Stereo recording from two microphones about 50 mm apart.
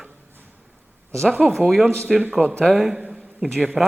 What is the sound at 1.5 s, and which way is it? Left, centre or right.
Speech, centre.